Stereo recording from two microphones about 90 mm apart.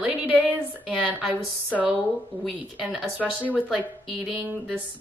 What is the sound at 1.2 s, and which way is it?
Speech, 15° right (ahead or behind).